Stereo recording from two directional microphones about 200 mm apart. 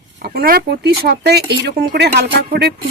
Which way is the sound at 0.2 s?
50° right (ahead or behind).